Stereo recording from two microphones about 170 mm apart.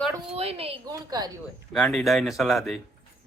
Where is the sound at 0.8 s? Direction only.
20° right (ahead or behind).